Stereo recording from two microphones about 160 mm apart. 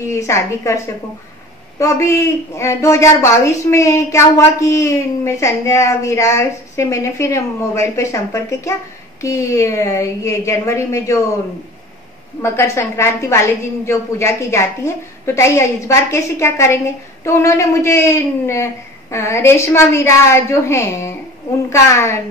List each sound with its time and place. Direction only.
0.0 s a woman's voice: 20° left (ahead or behind)
1.8 s a woman's voice: 20° left (ahead or behind)
12.4 s a woman's voice: 15° left (ahead or behind)